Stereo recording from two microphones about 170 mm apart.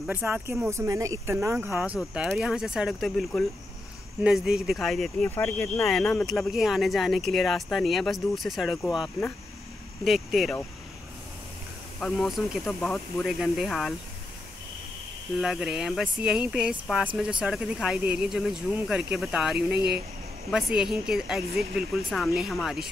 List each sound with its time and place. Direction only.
0.0 s speech: 10° right (ahead or behind)
5.3 s speech: 15° left (ahead or behind)
5.9 s speech: 5° left (ahead or behind)
10.0 s speech: centre (ahead or behind)
12.0 s speech: centre (ahead or behind)
15.3 s speech: 5° right (ahead or behind)
19.7 s speech: 75° right (ahead or behind)
20.5 s speech: 5° right (ahead or behind)